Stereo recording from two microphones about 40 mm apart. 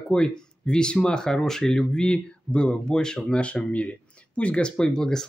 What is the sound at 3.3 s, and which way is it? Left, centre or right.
Speech, left.